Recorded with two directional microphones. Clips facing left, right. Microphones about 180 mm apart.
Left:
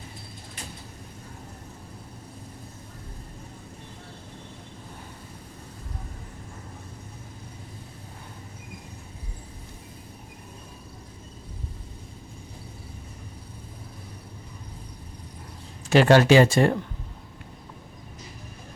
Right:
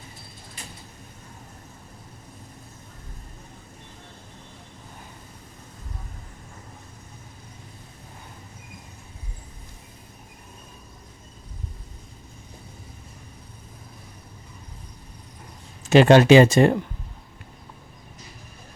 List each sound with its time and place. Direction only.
15.9 s speech: 20° right (ahead or behind)